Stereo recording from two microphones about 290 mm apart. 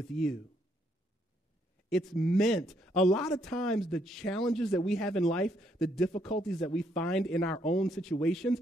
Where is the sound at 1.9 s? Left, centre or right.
Centre.